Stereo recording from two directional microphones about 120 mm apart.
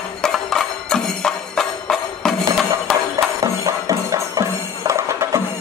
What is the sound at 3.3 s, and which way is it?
Music, 25° right (ahead or behind).